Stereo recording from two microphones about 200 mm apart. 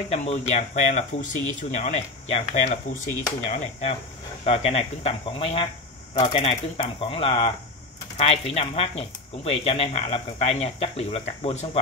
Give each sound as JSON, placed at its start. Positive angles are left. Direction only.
{"t": 0.1, "sound": "speech", "side_deg": 35}